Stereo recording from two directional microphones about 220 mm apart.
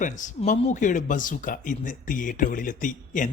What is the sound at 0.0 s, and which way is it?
Speech, 35° left (ahead or behind).